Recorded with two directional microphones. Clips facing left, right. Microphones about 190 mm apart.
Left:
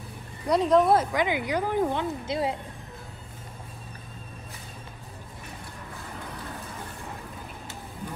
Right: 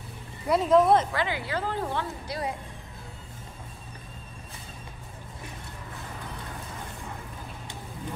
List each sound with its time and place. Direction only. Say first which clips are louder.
0.5 s speech: even; 5° right (ahead or behind)
1.1 s speech: left 4 dB; 15° left (ahead or behind)